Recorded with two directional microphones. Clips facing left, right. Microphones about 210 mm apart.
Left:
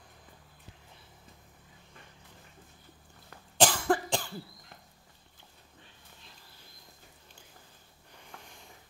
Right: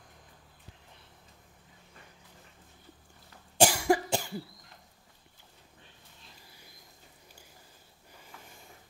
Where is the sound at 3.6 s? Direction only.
10° right (ahead or behind).